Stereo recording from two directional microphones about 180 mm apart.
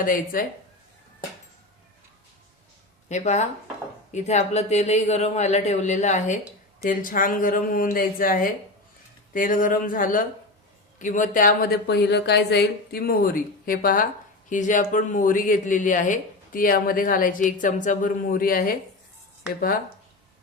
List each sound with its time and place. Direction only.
0.0 s speech: 50° left (ahead or behind)
3.1 s a man's voice: 40° left (ahead or behind)